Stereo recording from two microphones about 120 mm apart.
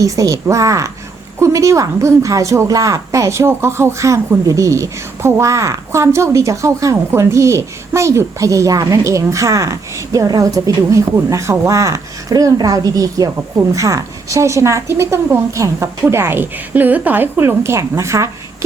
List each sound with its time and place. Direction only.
0.0 s a woman's voice: 30° right (ahead or behind)